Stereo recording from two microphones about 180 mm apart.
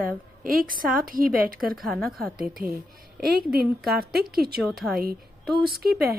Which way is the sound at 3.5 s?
55° right (ahead or behind).